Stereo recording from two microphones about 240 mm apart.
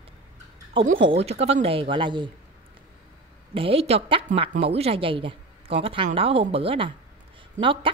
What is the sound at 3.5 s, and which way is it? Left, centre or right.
Speech, right.